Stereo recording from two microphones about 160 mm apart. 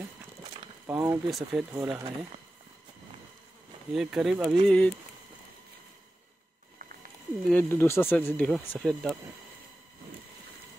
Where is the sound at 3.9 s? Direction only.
5° right (ahead or behind).